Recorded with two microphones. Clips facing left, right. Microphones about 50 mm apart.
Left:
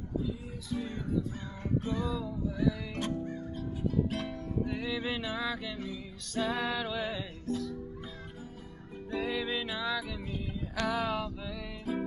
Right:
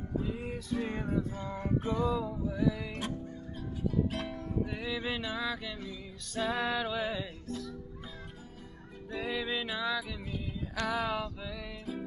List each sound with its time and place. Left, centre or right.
0.2 s music: right
1.4 s music: right
3.5 s music: centre
9.1 s music: centre